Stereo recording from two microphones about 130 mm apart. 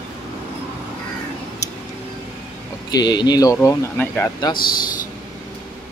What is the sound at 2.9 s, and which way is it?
Speech, 35° left (ahead or behind).